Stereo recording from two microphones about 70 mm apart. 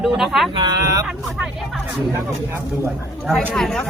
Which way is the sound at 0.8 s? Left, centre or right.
Right.